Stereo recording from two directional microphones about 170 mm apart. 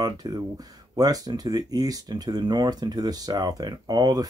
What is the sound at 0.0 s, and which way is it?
Speech, 20° right (ahead or behind).